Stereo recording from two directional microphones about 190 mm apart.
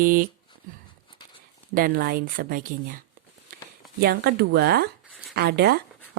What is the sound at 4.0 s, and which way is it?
Speech, 55° right (ahead or behind).